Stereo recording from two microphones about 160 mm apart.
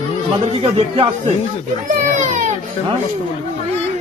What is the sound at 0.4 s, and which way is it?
Speech, 35° right (ahead or behind).